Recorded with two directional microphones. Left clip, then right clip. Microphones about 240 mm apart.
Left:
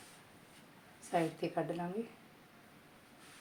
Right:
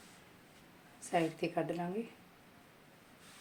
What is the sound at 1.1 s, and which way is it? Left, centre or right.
Speech, centre.